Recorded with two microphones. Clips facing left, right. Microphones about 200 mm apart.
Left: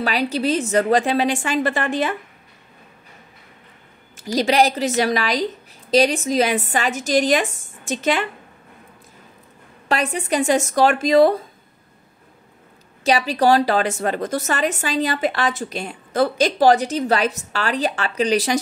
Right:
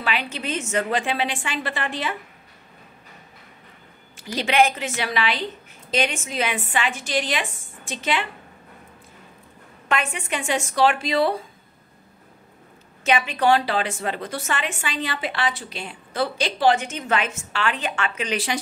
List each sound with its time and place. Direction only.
0.0 s a woman's voice: 40° left (ahead or behind)
4.2 s a woman's voice: 40° left (ahead or behind)
9.8 s a woman's voice: 35° left (ahead or behind)
13.0 s a woman's voice: 35° left (ahead or behind)